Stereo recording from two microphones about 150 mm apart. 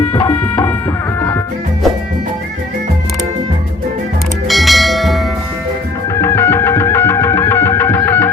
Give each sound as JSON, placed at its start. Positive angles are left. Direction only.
{"t": 0.1, "sound": "music", "side_deg": 30}
{"t": 4.4, "sound": "bell", "side_deg": 0}
{"t": 6.1, "sound": "music", "side_deg": 20}